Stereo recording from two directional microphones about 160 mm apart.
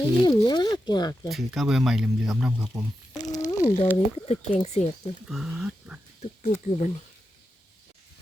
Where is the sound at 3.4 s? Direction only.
20° left (ahead or behind).